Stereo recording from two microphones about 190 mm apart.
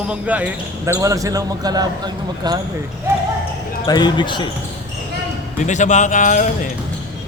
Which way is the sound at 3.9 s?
20° left (ahead or behind).